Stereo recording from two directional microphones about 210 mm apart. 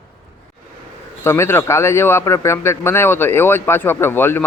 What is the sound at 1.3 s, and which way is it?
A man's voice, 10° left (ahead or behind).